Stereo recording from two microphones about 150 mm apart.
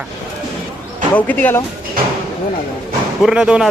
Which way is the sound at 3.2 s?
5° right (ahead or behind).